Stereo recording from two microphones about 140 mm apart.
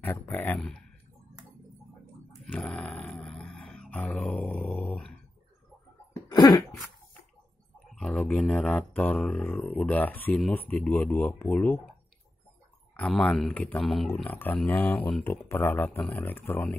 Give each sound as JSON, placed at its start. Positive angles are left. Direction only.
{"t": 0.0, "sound": "speech", "side_deg": 15}
{"t": 0.6, "sound": "speech", "side_deg": 5}
{"t": 2.4, "sound": "a sound", "side_deg": 5}
{"t": 6.2, "sound": "cough", "side_deg": 30}
{"t": 7.9, "sound": "speech", "side_deg": 5}
{"t": 12.9, "sound": "speech", "side_deg": 5}
{"t": 14.1, "sound": "speech", "side_deg": 15}
{"t": 15.2, "sound": "speech", "side_deg": 15}